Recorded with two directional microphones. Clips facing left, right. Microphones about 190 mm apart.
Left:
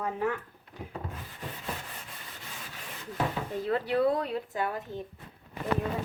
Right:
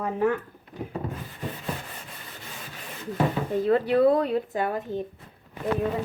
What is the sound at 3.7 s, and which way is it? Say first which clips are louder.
Speech: right 6 dB; 55° right (ahead or behind).